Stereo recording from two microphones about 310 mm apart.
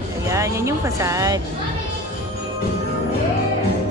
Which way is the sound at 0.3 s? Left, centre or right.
Centre.